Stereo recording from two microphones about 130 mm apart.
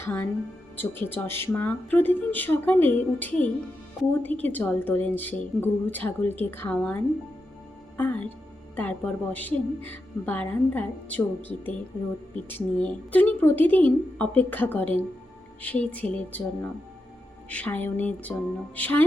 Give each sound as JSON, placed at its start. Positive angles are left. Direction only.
{"t": 0.0, "sound": "a woman's voice", "side_deg": 15}
{"t": 17.5, "sound": "a woman's voice", "side_deg": 10}